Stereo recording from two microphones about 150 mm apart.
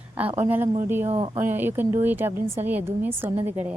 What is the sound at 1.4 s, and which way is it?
Speech, 15° right (ahead or behind).